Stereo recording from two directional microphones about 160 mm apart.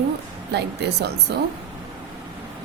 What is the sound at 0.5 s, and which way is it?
Speech, 90° right.